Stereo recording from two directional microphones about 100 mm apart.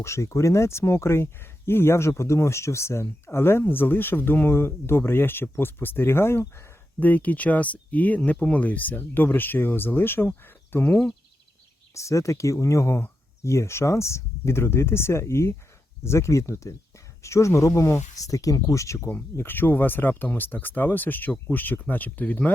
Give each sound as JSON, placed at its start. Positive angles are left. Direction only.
{"t": 0.0, "sound": "speech", "side_deg": 30}
{"t": 11.9, "sound": "speech", "side_deg": 30}
{"t": 19.1, "sound": "speech", "side_deg": 20}